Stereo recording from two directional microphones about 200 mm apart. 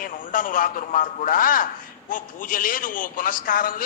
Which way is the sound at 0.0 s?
45° left (ahead or behind).